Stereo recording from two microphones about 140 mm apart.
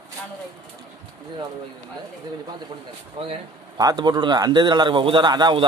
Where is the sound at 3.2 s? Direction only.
40° right (ahead or behind).